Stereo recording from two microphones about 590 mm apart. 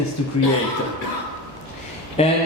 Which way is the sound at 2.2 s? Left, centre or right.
Centre.